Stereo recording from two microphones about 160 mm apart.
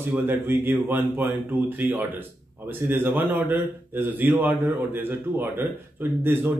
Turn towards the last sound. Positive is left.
turn(degrees=-15)  # may be behind; listen again after turning